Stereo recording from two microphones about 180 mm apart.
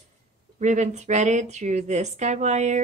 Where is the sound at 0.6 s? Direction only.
40° right (ahead or behind).